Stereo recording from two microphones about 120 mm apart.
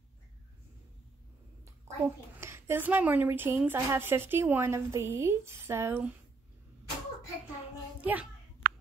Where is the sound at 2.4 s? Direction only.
20° right (ahead or behind).